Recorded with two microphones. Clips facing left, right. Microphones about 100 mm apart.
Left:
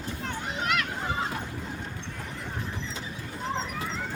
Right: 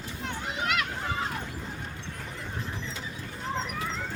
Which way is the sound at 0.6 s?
15° right (ahead or behind).